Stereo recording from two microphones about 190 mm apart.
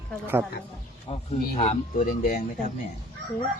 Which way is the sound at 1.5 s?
35° left (ahead or behind).